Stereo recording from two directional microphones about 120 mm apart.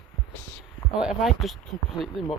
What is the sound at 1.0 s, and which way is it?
Speech, 5° right (ahead or behind).